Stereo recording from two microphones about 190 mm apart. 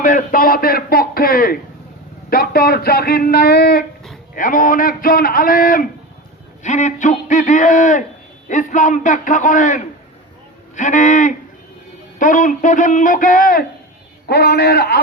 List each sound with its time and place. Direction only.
0.0 s a man's voice: 45° left (ahead or behind)